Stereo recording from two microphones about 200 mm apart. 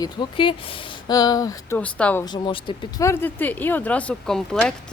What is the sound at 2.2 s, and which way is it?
Speech, 20° left (ahead or behind).